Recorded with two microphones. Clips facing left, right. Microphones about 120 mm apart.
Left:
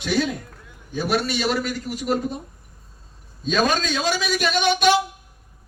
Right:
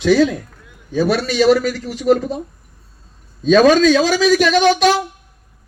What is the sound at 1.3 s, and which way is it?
Speech, 90° right.